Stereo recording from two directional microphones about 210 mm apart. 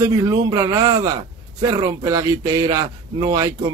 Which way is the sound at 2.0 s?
15° right (ahead or behind).